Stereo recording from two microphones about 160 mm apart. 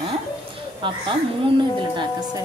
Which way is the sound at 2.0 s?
25° right (ahead or behind).